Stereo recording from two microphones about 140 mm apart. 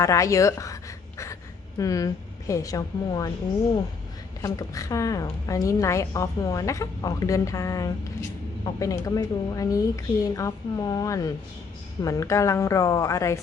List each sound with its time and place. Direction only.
0.0 s a woman's voice: 20° left (ahead or behind)
1.8 s a woman's voice: 25° left (ahead or behind)
4.4 s a woman's voice: 25° left (ahead or behind)